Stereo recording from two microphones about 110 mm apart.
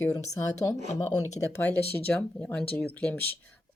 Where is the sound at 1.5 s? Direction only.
15° left (ahead or behind).